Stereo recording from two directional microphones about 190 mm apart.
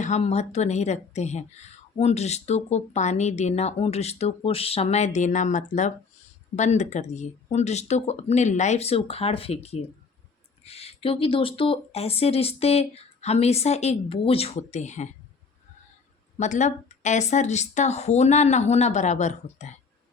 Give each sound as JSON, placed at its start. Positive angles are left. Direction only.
{"t": 0.0, "sound": "speech", "side_deg": 35}
{"t": 16.4, "sound": "speech", "side_deg": 40}